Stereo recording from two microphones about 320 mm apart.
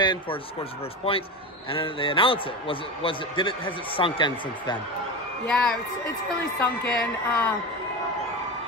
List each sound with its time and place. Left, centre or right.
0.0 s a man's voice: centre
5.5 s speech: centre
7.0 s speech: centre